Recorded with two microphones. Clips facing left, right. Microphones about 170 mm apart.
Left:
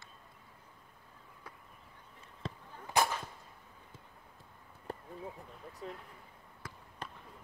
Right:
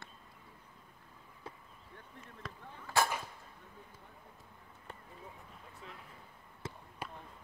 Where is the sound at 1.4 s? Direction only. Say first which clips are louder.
Right 5 dB; 25° right (ahead or behind).